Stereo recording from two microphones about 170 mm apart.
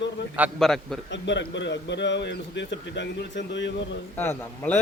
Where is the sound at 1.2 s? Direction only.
90° left.